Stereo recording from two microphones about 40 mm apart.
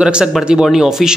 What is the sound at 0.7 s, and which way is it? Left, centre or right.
Speech, centre.